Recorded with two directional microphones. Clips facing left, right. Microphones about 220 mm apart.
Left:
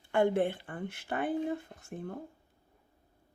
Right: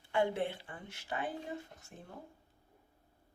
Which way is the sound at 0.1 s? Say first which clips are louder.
Left 6 dB; 50° left (ahead or behind).